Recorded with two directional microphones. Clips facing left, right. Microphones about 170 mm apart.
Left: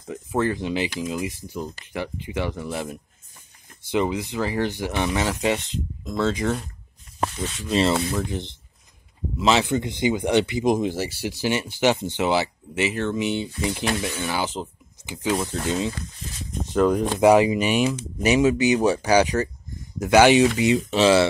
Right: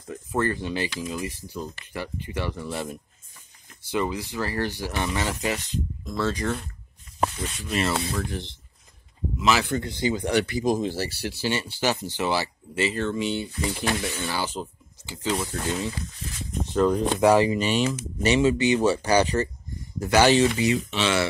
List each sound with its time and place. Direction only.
0.1 s speech: 10° left (ahead or behind)
3.9 s speech: 20° left (ahead or behind)
7.7 s speech: 25° left (ahead or behind)
20.7 s speech: 35° left (ahead or behind)